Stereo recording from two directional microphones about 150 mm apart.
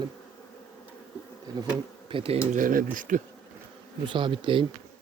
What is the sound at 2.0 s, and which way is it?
Speech, 35° right (ahead or behind).